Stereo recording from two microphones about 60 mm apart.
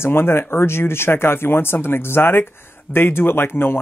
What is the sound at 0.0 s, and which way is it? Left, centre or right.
Speech, left.